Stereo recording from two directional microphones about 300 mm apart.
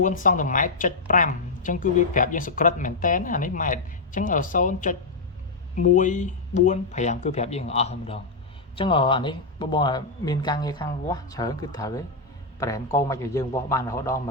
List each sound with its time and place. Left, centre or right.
0.0 s a woman's voice: left; by 14.2 s centre